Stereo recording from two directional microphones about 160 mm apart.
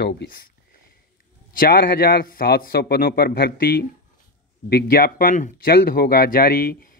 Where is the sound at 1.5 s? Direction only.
70° left (ahead or behind).